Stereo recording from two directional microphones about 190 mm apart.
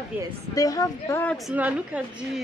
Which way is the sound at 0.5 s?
20° left (ahead or behind).